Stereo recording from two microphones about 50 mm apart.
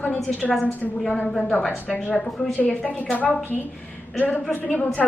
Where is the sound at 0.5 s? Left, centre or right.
Centre.